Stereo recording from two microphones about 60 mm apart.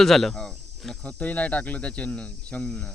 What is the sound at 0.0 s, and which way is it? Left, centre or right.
Cricket, centre.